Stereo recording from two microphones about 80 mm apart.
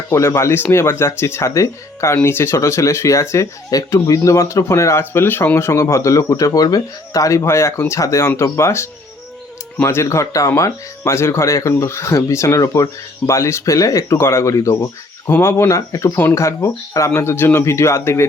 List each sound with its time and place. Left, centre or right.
0.1 s speech: left
2.1 s speech: left